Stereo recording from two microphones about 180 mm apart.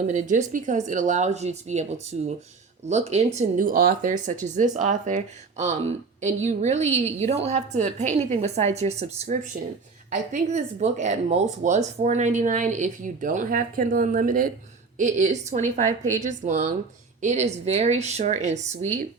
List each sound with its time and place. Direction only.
0.1 s a woman's voice: 40° right (ahead or behind)
3.3 s speech: 50° right (ahead or behind)
10.5 s a woman's voice: 40° right (ahead or behind)